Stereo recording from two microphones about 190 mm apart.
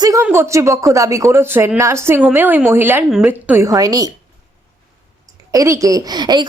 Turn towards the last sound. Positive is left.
turn(degrees=-20)  # may be behind; listen again after turning